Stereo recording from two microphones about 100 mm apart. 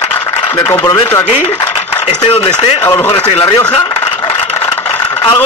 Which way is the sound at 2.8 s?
30° left (ahead or behind).